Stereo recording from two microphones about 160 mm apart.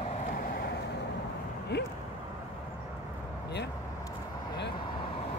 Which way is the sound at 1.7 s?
90° left.